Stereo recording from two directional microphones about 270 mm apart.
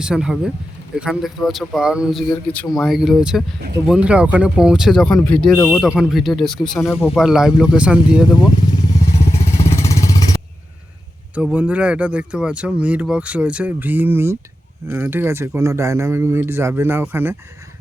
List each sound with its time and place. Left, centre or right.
0.0 s speech: centre
8.3 s speech: centre
9.6 s vehicle: centre
11.3 s speech: centre